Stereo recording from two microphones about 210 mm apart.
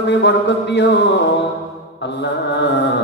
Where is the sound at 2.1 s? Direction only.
55° left (ahead or behind).